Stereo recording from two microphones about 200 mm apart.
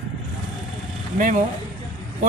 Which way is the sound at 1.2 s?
40° right (ahead or behind).